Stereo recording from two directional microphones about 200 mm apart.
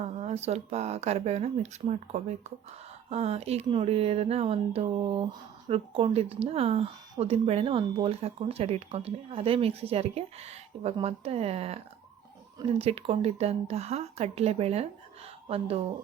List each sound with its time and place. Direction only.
0.0 s speech: 35° right (ahead or behind)